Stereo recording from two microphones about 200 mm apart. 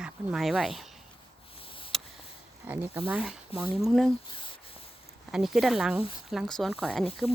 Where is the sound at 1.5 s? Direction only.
25° left (ahead or behind).